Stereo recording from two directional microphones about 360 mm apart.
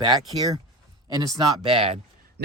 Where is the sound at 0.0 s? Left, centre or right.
Centre.